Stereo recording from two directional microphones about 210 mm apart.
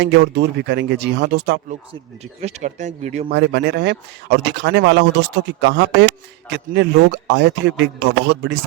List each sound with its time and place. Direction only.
0.0 s speech: 55° right (ahead or behind)
2.4 s speech: 35° right (ahead or behind)
3.3 s speech: 50° right (ahead or behind)